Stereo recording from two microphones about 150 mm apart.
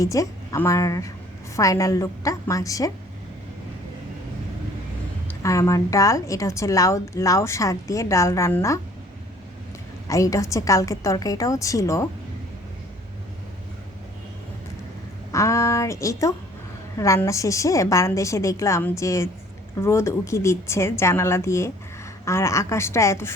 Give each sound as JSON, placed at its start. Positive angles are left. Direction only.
{"t": 0.0, "sound": "a woman's voice", "side_deg": 20}
{"t": 5.3, "sound": "a woman's voice", "side_deg": 20}
{"t": 10.1, "sound": "a woman's voice", "side_deg": 20}
{"t": 15.3, "sound": "a woman's voice", "side_deg": 20}